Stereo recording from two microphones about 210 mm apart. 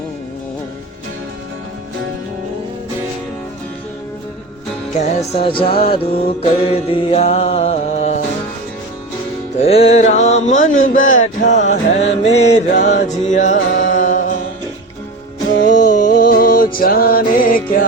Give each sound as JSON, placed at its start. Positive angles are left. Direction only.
{"t": 4.9, "sound": "music", "side_deg": 35}
{"t": 6.4, "sound": "mantra", "side_deg": 25}
{"t": 9.6, "sound": "mantra", "side_deg": 30}
{"t": 15.6, "sound": "music", "side_deg": 40}